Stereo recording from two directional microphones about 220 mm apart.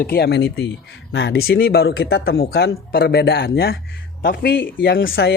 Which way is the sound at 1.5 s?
45° left (ahead or behind).